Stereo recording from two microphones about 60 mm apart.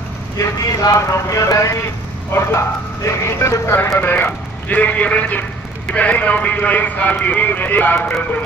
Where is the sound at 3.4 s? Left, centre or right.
Left.